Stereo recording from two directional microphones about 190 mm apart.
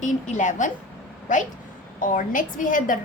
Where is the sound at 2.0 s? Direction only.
45° left (ahead or behind).